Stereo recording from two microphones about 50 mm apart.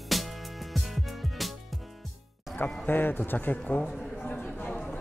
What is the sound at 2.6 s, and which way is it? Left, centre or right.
Speech, left.